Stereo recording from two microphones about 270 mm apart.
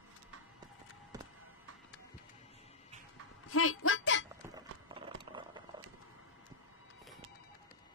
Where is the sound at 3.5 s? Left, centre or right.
Left.